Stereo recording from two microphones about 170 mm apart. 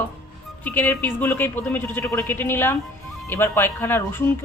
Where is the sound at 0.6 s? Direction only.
10° left (ahead or behind).